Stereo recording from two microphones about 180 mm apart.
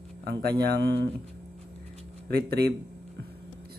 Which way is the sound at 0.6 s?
70° right (ahead or behind).